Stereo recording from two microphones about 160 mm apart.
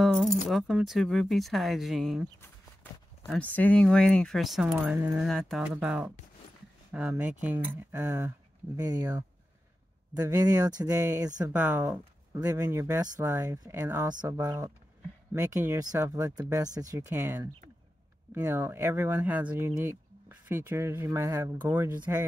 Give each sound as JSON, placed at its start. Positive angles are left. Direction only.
{"t": 0.0, "sound": "keys jangling", "side_deg": 0}
{"t": 0.5, "sound": "speech", "side_deg": 0}
{"t": 3.3, "sound": "speech", "side_deg": 10}
{"t": 4.7, "sound": "speech", "side_deg": -10}
{"t": 5.2, "sound": "speech", "side_deg": 0}
{"t": 11.5, "sound": "speech", "side_deg": -10}